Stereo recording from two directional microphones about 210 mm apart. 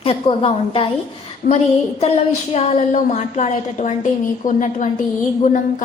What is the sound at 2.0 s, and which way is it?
A woman's voice, 30° left (ahead or behind).